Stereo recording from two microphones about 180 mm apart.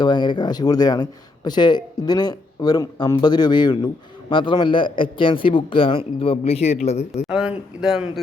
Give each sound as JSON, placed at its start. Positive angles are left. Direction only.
{"t": 0.0, "sound": "a man's voice", "side_deg": 25}
{"t": 7.3, "sound": "speech", "side_deg": -5}